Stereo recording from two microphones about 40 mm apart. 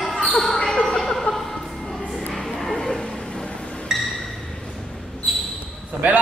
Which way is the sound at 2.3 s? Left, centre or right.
Centre.